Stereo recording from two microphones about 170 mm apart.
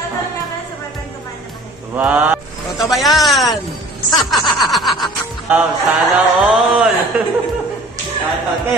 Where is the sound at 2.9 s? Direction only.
Centre (ahead or behind).